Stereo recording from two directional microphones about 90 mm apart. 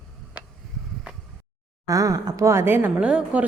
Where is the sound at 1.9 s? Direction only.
40° right (ahead or behind); by 2.9 s 25° right (ahead or behind).